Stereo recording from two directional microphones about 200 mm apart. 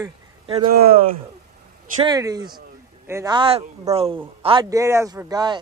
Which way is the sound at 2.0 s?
20° right (ahead or behind).